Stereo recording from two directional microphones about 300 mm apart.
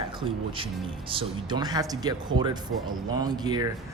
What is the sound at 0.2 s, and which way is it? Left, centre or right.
Speech, centre.